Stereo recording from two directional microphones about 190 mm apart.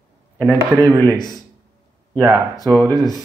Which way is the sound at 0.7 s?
15° right (ahead or behind).